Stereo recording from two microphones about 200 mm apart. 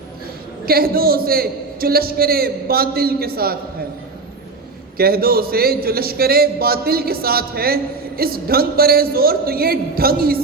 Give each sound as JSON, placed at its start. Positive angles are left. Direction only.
{"t": 0.6, "sound": "a man's voice", "side_deg": -50}
{"t": 4.9, "sound": "a man's voice", "side_deg": -50}